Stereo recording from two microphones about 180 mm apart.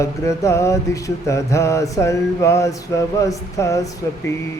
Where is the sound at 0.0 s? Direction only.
15° left (ahead or behind).